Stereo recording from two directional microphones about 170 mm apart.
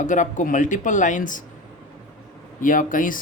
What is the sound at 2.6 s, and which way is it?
Speech, 50° left (ahead or behind).